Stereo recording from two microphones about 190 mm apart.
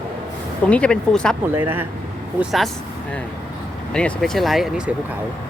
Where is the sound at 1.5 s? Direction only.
10° right (ahead or behind).